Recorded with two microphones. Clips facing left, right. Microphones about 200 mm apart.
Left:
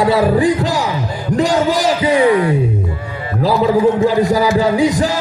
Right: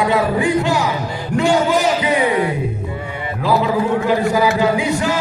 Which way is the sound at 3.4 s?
35° left (ahead or behind).